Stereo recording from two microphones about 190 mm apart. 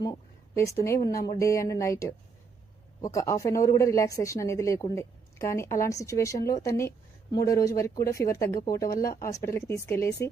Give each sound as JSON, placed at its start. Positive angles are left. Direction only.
{"t": 0.0, "sound": "a woman's voice", "side_deg": 20}